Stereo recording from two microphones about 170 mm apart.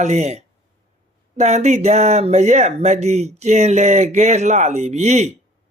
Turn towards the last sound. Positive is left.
turn(degrees=-40)  # may be behind; listen again after turning